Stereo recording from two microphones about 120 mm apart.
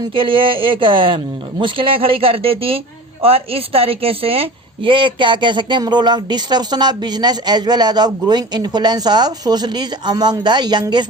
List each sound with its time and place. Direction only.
0.1 s speech: 45° right (ahead or behind)